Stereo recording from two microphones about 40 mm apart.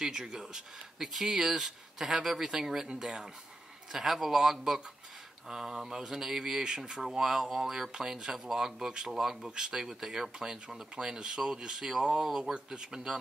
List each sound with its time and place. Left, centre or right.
0.0 s speech: centre